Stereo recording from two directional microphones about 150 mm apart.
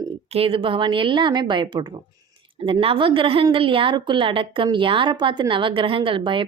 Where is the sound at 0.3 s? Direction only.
35° right (ahead or behind).